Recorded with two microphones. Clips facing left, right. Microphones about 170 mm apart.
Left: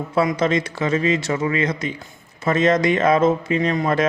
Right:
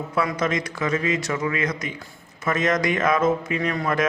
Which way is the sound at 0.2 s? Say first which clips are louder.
Left 5 dB; 30° left (ahead or behind).